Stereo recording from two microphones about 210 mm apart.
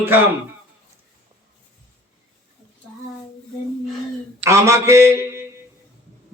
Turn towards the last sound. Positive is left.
turn(degrees=-10)  # may be behind; listen again after turning